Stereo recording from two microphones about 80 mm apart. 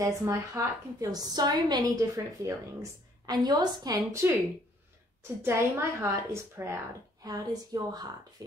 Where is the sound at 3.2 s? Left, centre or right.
Right.